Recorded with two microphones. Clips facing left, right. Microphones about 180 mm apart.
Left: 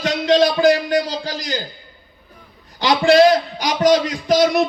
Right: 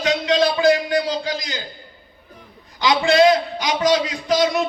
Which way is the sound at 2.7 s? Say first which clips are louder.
Left 3 dB; 40° left (ahead or behind).